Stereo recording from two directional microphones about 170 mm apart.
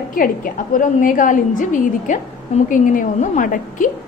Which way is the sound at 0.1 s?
55° left (ahead or behind).